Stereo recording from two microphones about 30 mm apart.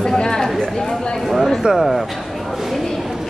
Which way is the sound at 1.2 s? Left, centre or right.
Centre.